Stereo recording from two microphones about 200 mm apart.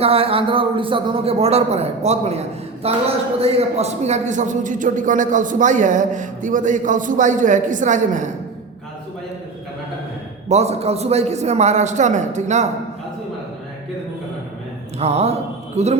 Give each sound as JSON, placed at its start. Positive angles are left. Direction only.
{"t": 0.0, "sound": "a man's voice", "side_deg": -30}
{"t": 10.5, "sound": "a man's voice", "side_deg": -35}
{"t": 14.9, "sound": "speech", "side_deg": -30}